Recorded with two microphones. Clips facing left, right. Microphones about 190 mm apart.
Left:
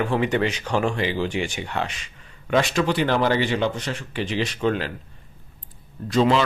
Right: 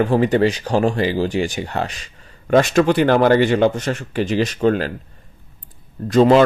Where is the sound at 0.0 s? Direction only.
40° right (ahead or behind).